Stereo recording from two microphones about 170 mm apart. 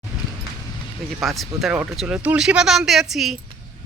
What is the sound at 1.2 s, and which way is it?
A woman's voice, centre (ahead or behind).